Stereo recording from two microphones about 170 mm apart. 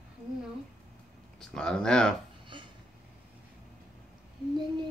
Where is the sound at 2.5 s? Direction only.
30° right (ahead or behind).